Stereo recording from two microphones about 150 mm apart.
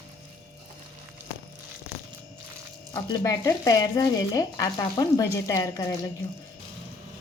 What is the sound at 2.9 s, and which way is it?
Speech, 25° left (ahead or behind).